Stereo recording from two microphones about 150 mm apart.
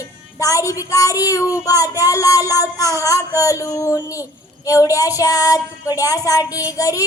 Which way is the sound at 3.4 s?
20° left (ahead or behind).